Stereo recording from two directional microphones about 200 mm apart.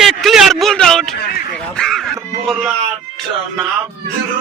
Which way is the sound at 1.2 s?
50° left (ahead or behind).